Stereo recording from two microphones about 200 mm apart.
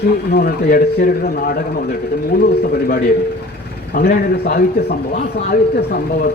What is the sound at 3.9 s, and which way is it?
A man's voice, 50° left (ahead or behind).